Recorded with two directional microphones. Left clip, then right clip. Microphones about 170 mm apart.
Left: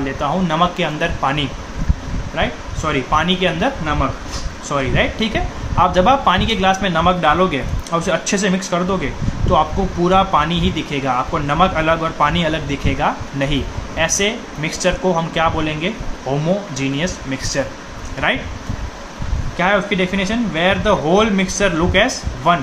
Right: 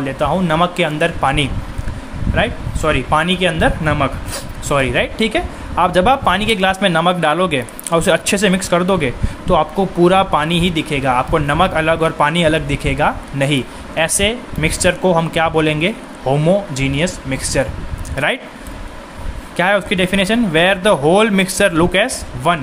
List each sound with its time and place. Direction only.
0.0 s speech: 45° right (ahead or behind)
19.5 s speech: 50° right (ahead or behind)